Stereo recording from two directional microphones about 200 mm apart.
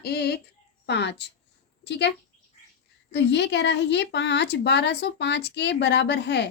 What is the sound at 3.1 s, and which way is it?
Speech, 60° left (ahead or behind).